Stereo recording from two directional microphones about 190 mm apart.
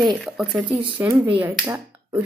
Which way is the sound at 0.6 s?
25° right (ahead or behind).